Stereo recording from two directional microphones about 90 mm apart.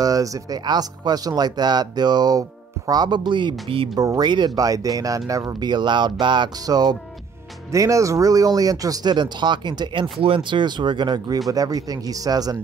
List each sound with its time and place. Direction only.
0.0 s speech: 40° right (ahead or behind); by 3.9 s 80° right
3.9 s speech: 45° right (ahead or behind)
5.6 s speech: 55° right (ahead or behind)
6.6 s speech: 45° right (ahead or behind)
7.7 s speech: 35° right (ahead or behind); by 10.0 s 55° right (ahead or behind)
10.2 s speech: 75° right (ahead or behind); by 12.5 s 45° right (ahead or behind)